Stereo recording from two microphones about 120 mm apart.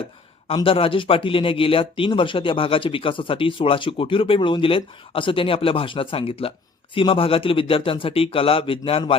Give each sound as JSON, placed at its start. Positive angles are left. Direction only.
{"t": 0.4, "sound": "speech", "side_deg": 50}